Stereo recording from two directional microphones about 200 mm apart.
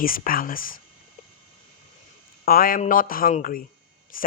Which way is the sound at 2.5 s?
45° left (ahead or behind).